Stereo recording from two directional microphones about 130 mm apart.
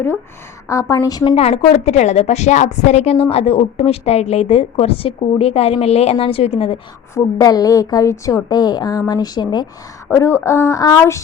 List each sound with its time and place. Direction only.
0.7 s a woman's voice: 25° left (ahead or behind)
1.4 s a woman's voice: 50° left (ahead or behind)
7.1 s a woman's voice: 30° left (ahead or behind)
10.1 s a woman's voice: 20° left (ahead or behind)